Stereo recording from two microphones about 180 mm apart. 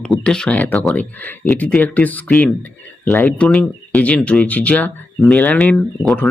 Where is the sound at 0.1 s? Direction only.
5° left (ahead or behind).